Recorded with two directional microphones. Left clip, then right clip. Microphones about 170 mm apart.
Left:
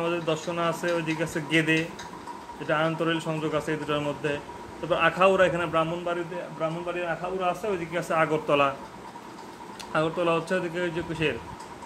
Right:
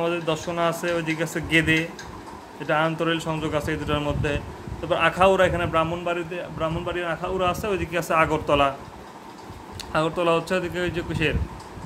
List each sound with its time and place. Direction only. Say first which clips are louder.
0.0 s a man's voice: right 3 dB; 20° right (ahead or behind)
6.1 s speech: right 3 dB; 30° right (ahead or behind)
6.6 s a man's voice: right 3 dB; 55° right (ahead or behind)
7.9 s speech: right 4 dB; 30° right (ahead or behind); by 8.7 s 15° right (ahead or behind)
9.9 s speech: right 3 dB; 20° right (ahead or behind)